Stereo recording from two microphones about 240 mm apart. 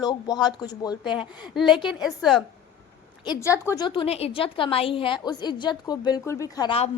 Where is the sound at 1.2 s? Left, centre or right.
Centre.